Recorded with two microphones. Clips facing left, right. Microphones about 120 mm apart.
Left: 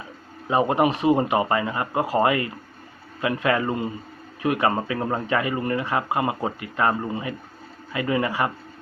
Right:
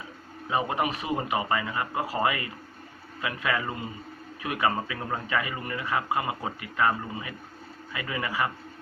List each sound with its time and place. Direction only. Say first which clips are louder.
0.5 s speech: left 7 dB; 35° left (ahead or behind)